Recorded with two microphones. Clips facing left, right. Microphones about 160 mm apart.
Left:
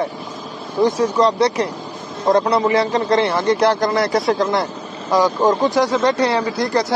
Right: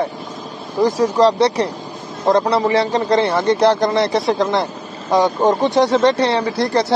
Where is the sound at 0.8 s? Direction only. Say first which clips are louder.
Right 2 dB; 40° right (ahead or behind).